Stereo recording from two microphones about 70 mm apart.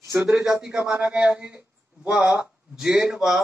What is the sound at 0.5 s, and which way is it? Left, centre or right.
A man's voice, centre.